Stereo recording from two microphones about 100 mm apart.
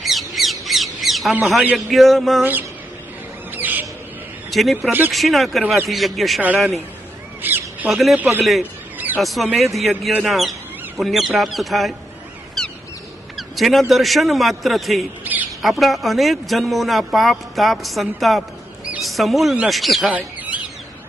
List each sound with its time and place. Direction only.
0.0 s squawk: centre (ahead or behind)
1.7 s a man's voice: centre (ahead or behind)
2.4 s speech: 20° right (ahead or behind)
3.5 s bird: 20° right (ahead or behind)
4.5 s a man's voice: centre (ahead or behind)
4.9 s speech: 20° right (ahead or behind)
5.1 s a man's voice: centre (ahead or behind)
7.4 s crow: 20° right (ahead or behind)
7.9 s a man's voice: centre (ahead or behind)
12.6 s a sound: 5° left (ahead or behind)
13.3 s a man's voice: centre (ahead or behind)
15.2 s bird: 15° right (ahead or behind)
15.6 s a man's voice: centre (ahead or behind)
20.1 s a sound: 15° right (ahead or behind)